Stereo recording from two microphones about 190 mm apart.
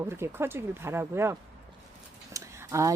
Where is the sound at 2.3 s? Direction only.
15° right (ahead or behind).